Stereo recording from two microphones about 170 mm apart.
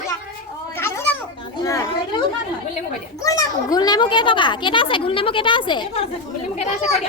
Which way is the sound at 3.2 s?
20° left (ahead or behind).